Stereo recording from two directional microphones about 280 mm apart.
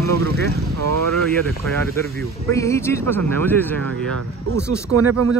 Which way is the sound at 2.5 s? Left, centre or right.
Centre.